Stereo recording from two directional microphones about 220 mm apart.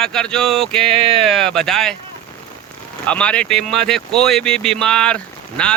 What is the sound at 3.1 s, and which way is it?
Speech, 5° left (ahead or behind).